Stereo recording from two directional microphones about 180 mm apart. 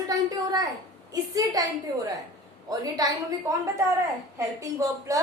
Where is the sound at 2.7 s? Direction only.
20° right (ahead or behind).